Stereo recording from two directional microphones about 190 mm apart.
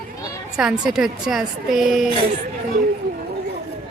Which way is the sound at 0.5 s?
5° right (ahead or behind).